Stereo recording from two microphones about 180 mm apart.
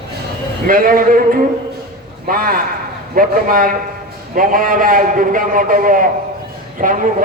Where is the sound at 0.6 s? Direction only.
50° right (ahead or behind).